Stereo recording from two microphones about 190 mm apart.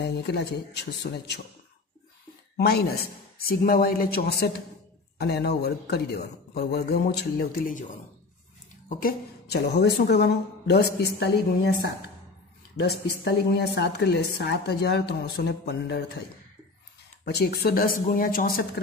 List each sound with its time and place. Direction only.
0.0 s a woman's voice: 60° left (ahead or behind)
2.5 s a woman's voice: 55° left (ahead or behind)
8.8 s a woman's voice: 55° left (ahead or behind)